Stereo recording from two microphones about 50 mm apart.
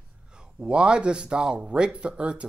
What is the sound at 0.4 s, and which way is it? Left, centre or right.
Speech, centre.